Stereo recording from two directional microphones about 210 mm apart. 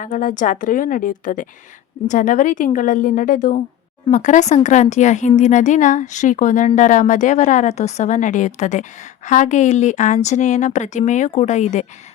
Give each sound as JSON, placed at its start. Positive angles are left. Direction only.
{"t": 0.0, "sound": "speech", "side_deg": 40}